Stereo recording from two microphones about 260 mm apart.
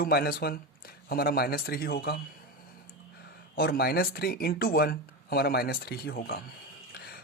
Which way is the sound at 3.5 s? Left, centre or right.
Left.